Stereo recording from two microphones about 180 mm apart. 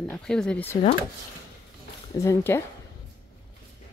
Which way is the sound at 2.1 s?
15° left (ahead or behind).